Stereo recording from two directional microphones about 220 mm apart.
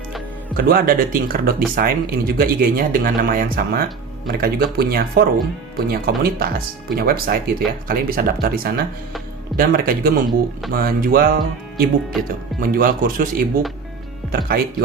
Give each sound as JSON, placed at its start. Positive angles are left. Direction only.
{"t": 0.5, "sound": "speech", "side_deg": -40}